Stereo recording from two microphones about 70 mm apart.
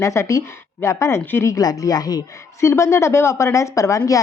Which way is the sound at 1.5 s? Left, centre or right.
Left.